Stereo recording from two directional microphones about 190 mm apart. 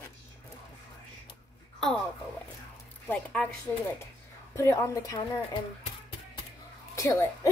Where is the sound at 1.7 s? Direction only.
5° left (ahead or behind).